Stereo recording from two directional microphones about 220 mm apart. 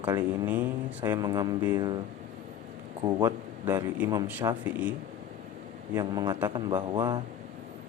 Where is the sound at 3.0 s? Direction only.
15° right (ahead or behind).